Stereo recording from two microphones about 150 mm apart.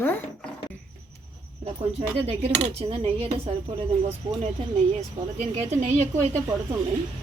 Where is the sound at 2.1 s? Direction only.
40° right (ahead or behind).